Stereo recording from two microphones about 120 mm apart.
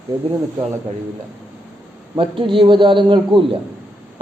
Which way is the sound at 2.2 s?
45° right (ahead or behind).